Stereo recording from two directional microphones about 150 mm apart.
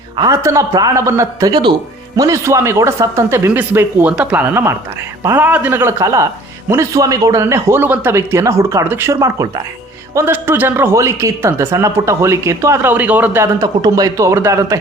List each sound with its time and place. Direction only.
0.2 s speech: 20° right (ahead or behind)